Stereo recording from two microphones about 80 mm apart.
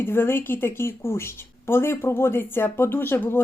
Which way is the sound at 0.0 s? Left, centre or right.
Left.